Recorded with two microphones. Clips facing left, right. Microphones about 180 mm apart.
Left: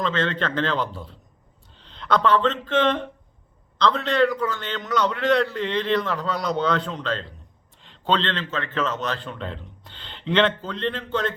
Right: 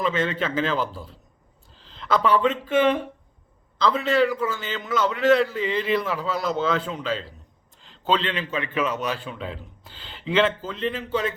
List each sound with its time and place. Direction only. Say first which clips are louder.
0.0 s a man's voice: even; 10° right (ahead or behind)